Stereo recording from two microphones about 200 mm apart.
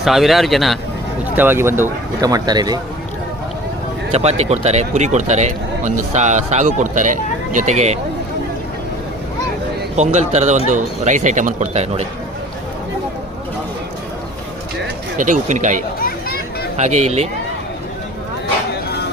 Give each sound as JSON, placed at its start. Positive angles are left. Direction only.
{"t": 0.0, "sound": "speech", "side_deg": 0}
{"t": 1.4, "sound": "speech", "side_deg": -10}
{"t": 4.1, "sound": "speech", "side_deg": -30}
{"t": 9.9, "sound": "speech", "side_deg": -35}
{"t": 15.2, "sound": "speech", "side_deg": -40}
{"t": 16.0, "sound": "a sound", "side_deg": 45}
{"t": 16.7, "sound": "speech", "side_deg": -35}